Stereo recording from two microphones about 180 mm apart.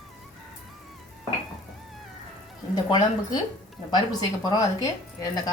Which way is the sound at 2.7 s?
25° left (ahead or behind).